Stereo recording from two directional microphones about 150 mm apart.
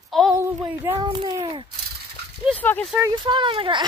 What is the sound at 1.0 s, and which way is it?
Speech, 30° right (ahead or behind).